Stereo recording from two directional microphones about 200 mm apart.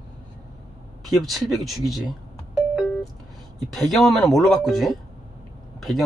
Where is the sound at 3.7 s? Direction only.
Centre (ahead or behind).